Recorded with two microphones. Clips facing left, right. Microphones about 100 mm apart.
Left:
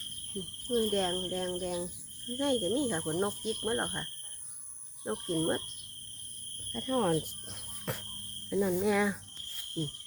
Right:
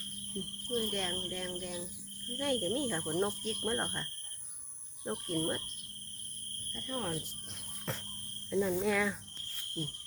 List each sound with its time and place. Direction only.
0.8 s speech: 35° left (ahead or behind)
2.4 s speech: 25° left (ahead or behind)
6.7 s speech: 60° left (ahead or behind)
7.9 s speech: 15° left (ahead or behind)